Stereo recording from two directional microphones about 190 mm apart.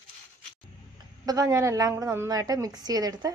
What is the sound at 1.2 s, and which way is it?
A woman's voice, 20° right (ahead or behind).